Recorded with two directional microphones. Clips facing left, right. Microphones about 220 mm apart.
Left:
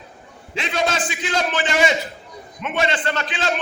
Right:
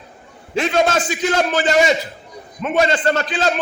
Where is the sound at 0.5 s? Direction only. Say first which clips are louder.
Right 6 dB; 45° right (ahead or behind).